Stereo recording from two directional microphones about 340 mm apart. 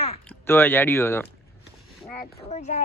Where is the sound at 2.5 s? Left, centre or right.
Centre.